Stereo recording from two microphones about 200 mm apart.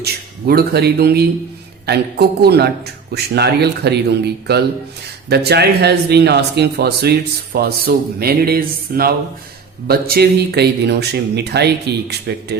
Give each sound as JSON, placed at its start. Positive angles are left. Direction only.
{"t": 0.0, "sound": "speech", "side_deg": -50}